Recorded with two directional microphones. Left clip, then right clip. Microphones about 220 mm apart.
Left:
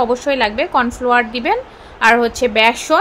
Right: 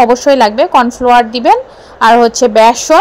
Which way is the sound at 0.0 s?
25° right (ahead or behind).